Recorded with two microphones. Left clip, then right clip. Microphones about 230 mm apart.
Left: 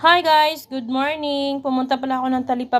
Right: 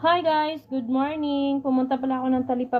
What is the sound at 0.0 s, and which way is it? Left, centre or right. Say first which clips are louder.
A woman's voice: left 7 dB; left.